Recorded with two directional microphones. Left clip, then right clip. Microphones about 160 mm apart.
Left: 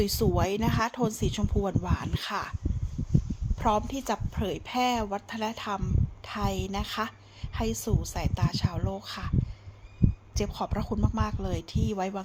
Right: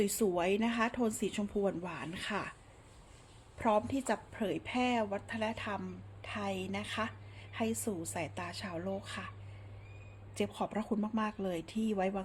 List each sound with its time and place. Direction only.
0.0 s speech: 30° left (ahead or behind)
3.6 s a woman's voice: 35° left (ahead or behind)
10.3 s speech: 25° left (ahead or behind)